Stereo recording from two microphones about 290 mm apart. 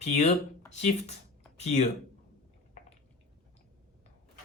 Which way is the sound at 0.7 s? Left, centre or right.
Left.